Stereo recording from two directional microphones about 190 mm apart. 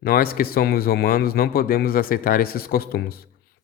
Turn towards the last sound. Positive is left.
turn(degrees=50)  # may be behind; listen again after turning